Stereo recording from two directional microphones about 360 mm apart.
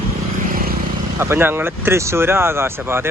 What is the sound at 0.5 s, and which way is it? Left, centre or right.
Vehicle, right.